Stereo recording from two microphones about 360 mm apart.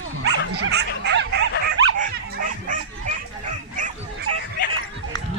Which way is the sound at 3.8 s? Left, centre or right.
Right.